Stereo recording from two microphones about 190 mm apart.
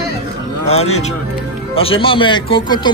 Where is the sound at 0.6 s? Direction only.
35° left (ahead or behind).